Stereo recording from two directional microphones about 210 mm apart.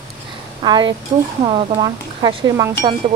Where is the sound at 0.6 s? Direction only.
20° right (ahead or behind).